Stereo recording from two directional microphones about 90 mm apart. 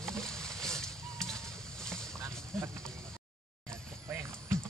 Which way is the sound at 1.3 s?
5° left (ahead or behind).